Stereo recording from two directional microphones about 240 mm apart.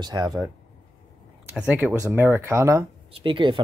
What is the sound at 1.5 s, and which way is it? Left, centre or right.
Speech, centre.